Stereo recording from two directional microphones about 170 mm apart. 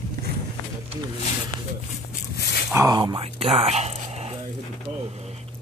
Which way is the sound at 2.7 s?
20° right (ahead or behind).